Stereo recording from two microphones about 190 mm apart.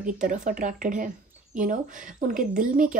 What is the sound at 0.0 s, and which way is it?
Speech, 40° right (ahead or behind).